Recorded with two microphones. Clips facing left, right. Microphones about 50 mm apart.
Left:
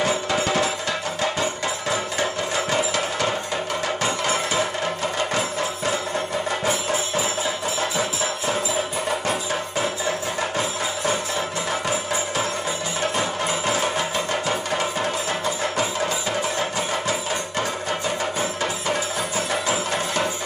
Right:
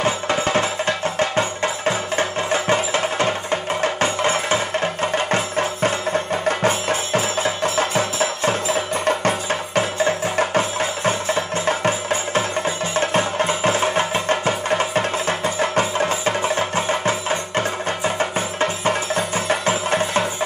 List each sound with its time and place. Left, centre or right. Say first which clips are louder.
0.0 s music: right 2 dB; right
13.7 s music: right 4 dB; right
19.6 s music: right 4 dB; right